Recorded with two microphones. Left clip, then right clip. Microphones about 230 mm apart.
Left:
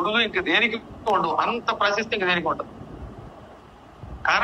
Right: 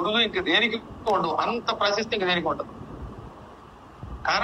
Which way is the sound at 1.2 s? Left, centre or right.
Centre.